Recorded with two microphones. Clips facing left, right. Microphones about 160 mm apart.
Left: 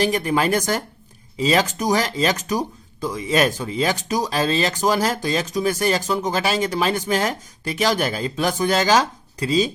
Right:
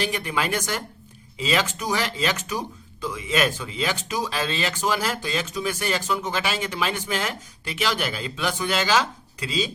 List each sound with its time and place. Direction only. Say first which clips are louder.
0.0 s speech: left 7 dB; 40° left (ahead or behind)